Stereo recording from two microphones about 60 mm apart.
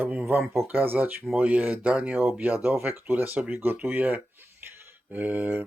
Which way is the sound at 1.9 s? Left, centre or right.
Centre.